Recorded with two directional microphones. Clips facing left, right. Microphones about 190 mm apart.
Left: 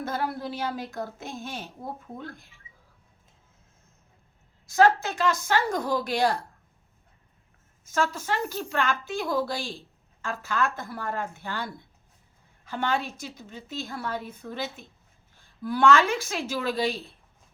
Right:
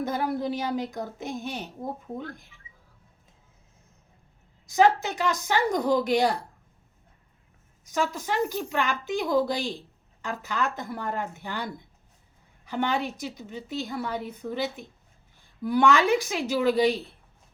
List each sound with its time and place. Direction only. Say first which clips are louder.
0.0 s a woman's voice: right 3 dB; 15° right (ahead or behind)
4.6 s a woman's voice: even; 15° right (ahead or behind)
7.9 s a woman's voice: even; 15° right (ahead or behind)